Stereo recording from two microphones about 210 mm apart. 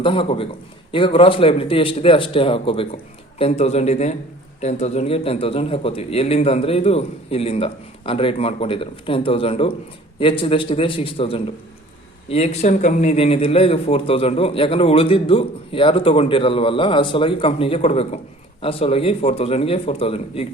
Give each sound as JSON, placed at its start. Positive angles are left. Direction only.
{"t": 0.0, "sound": "a man's voice", "side_deg": 25}